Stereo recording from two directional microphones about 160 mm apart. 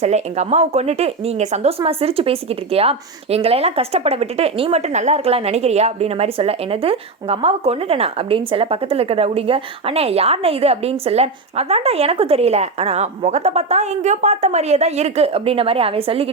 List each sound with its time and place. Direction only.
0.0 s speech: 45° right (ahead or behind)